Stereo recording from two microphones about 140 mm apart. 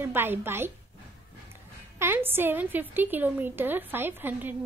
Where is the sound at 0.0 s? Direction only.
15° right (ahead or behind).